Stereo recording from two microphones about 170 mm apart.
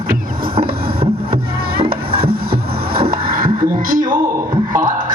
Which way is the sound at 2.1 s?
65° right (ahead or behind).